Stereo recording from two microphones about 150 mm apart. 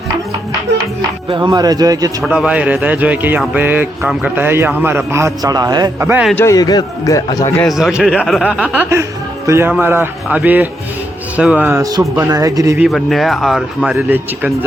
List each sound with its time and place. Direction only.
1.3 s speech: 30° right (ahead or behind)
2.2 s a man's voice: 5° right (ahead or behind); by 6.1 s 25° right (ahead or behind)
6.4 s a man's voice: 25° left (ahead or behind)
7.7 s a man's voice: centre (ahead or behind)
11.8 s speech: 25° right (ahead or behind)
12.9 s a man's voice: centre (ahead or behind)